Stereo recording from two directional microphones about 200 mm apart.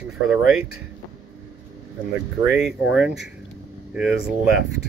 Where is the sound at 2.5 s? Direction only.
5° right (ahead or behind).